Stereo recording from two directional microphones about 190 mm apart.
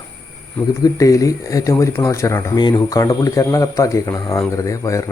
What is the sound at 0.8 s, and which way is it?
Speech, 15° left (ahead or behind).